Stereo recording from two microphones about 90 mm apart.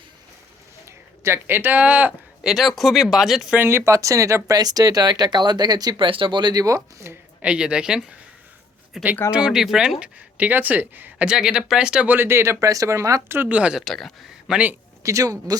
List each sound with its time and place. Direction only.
1.2 s speech: 25° right (ahead or behind)
2.5 s speech: centre (ahead or behind)
3.5 s speech: 25° right (ahead or behind); by 6.0 s 50° right (ahead or behind)
6.0 s speech: 70° right (ahead or behind); by 7.2 s 35° right (ahead or behind)
7.4 s speech: 10° right (ahead or behind)
11.3 s speech: 5° right (ahead or behind)
12.1 s speech: 25° right (ahead or behind)
13.2 s speech: 25° right (ahead or behind)
13.8 s speech: 5° left (ahead or behind)
14.5 s speech: 15° right (ahead or behind)
15.0 s speech: 35° right (ahead or behind)